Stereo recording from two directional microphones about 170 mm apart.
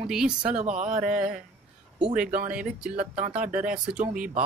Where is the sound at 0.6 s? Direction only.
45° right (ahead or behind).